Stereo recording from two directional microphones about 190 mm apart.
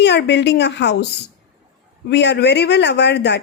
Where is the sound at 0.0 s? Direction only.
65° left (ahead or behind).